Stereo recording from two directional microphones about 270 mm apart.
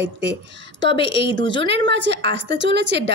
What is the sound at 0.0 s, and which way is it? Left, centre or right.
A woman's voice, right.